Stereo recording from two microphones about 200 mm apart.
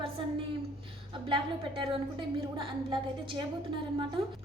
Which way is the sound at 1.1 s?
25° right (ahead or behind).